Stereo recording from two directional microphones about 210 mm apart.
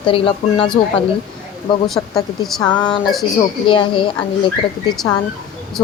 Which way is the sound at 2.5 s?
5° left (ahead or behind).